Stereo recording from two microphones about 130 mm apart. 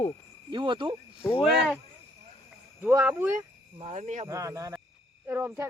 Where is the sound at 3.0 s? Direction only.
15° right (ahead or behind).